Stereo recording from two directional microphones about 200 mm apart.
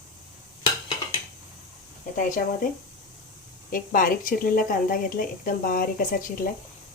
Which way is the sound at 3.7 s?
45° left (ahead or behind).